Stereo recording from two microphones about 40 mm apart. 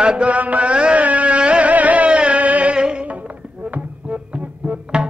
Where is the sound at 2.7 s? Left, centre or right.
Right.